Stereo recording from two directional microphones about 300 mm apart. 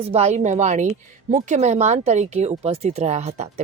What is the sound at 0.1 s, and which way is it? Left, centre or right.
Speech, right.